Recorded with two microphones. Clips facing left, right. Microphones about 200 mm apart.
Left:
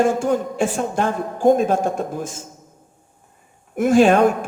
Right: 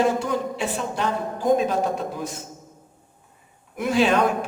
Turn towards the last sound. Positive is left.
turn(degrees=50)  # may be behind; listen again after turning